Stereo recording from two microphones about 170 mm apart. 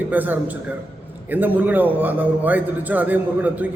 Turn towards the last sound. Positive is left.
turn(degrees=-10)  # may be behind; listen again after turning